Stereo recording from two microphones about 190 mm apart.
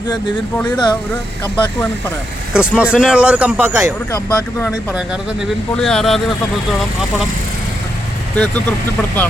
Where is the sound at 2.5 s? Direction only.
5° right (ahead or behind).